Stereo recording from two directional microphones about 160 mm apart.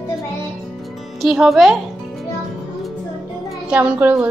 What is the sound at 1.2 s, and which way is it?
Speech, centre (ahead or behind).